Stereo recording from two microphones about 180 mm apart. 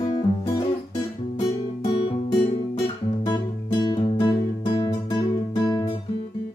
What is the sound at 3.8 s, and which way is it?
Music, 25° left (ahead or behind).